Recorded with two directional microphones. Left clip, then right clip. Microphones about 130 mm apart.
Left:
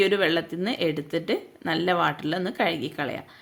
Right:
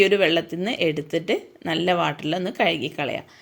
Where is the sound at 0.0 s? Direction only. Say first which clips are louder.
Right 4 dB; centre (ahead or behind).